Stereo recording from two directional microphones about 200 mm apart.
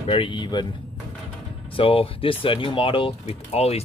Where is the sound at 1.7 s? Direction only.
25° left (ahead or behind).